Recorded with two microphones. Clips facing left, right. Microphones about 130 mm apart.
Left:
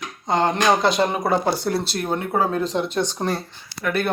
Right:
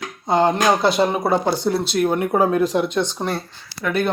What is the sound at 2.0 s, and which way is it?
Speech, 15° right (ahead or behind).